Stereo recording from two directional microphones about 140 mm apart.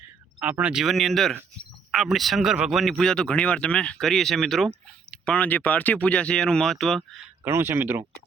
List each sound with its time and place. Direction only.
0.3 s speech: 10° right (ahead or behind)
7.4 s speech: 15° right (ahead or behind)